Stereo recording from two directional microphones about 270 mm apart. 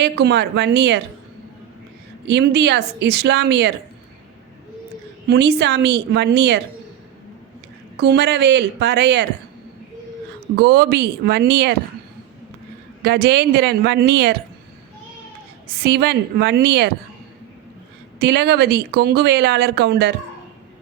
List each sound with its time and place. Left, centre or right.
0.0 s speech: right
2.2 s speech: right
5.3 s speech: right
7.9 s speech: right
10.6 s speech: right
13.0 s speech: right
15.8 s speech: right
18.2 s speech: right